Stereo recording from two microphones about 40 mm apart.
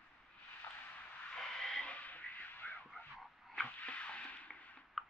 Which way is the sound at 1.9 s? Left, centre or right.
Left.